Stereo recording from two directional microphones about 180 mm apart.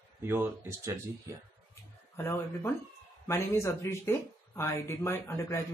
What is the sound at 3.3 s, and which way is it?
Speech, 15° left (ahead or behind).